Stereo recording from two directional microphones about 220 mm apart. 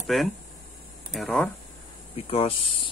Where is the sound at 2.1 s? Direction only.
25° left (ahead or behind).